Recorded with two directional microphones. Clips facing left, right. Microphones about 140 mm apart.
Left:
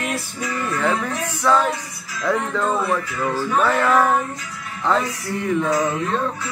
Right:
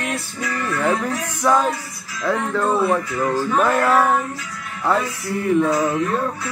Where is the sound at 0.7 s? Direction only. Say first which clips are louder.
Right 2 dB; 10° right (ahead or behind).